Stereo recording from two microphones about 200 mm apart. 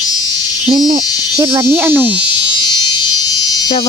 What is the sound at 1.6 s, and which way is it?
Speech, 10° right (ahead or behind).